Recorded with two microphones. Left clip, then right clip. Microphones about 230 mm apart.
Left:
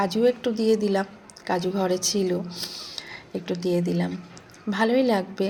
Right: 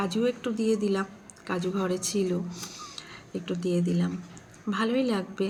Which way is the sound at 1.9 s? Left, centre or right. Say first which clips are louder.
Left 5 dB; centre.